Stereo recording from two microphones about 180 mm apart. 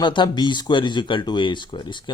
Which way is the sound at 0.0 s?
25° left (ahead or behind).